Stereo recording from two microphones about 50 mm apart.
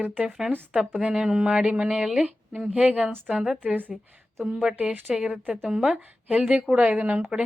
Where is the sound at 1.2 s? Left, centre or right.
Centre.